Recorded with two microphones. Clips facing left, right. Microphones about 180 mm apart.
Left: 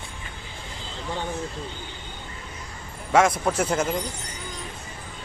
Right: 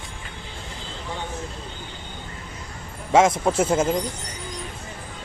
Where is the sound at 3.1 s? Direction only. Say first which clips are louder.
Right 3 dB; 25° right (ahead or behind).